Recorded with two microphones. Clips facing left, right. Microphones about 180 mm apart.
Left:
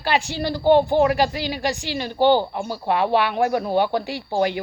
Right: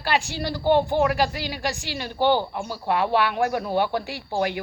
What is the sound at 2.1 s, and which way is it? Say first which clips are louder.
Speech: left 4 dB; 35° left (ahead or behind).